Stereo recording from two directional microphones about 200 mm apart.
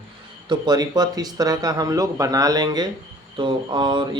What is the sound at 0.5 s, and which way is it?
Speech, 20° right (ahead or behind).